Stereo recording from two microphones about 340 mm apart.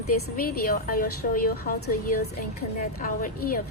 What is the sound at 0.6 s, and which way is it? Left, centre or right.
A woman's voice, left.